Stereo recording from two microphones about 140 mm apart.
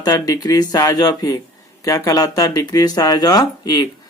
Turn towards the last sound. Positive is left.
turn(degrees=30)  # may be behind; listen again after turning